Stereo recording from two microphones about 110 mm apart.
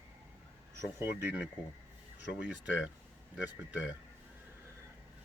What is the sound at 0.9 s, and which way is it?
Speech, 20° right (ahead or behind).